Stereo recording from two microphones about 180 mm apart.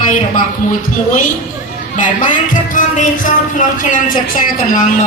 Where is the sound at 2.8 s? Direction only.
45° left (ahead or behind).